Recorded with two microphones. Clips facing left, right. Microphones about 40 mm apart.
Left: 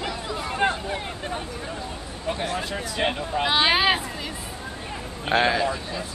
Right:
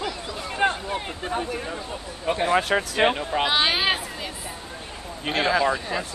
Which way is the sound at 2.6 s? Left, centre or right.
Right.